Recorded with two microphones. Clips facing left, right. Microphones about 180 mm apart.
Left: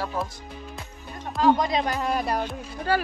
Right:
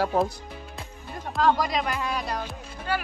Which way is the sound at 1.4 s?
25° left (ahead or behind).